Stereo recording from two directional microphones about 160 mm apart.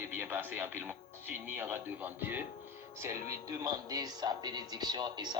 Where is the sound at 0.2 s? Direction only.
10° right (ahead or behind).